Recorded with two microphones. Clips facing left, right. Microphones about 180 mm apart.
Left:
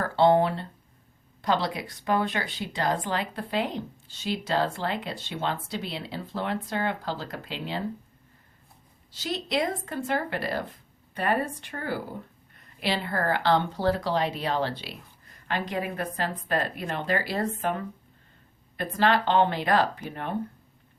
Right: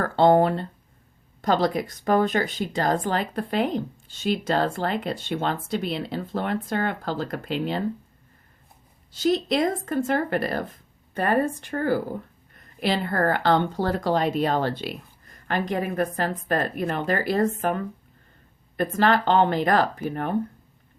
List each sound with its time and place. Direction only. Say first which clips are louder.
0.0 s speech: right 3 dB; 50° right (ahead or behind)
9.1 s speech: right 7 dB; 50° right (ahead or behind)
18.8 s speech: right 3 dB; 45° right (ahead or behind)